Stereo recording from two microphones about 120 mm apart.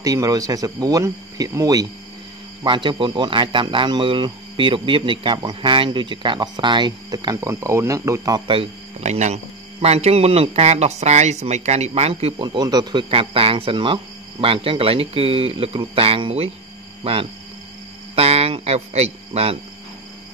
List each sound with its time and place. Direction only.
0.0 s speech: 30° right (ahead or behind)
2.6 s speech: 40° right (ahead or behind); by 8.4 s 25° right (ahead or behind)
9.0 s speech: 65° right (ahead or behind)
12.4 s speech: 35° right (ahead or behind)
13.1 s speech: 50° right (ahead or behind)